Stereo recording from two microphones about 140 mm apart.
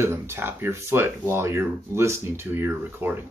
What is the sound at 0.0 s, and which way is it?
Speech, 20° right (ahead or behind).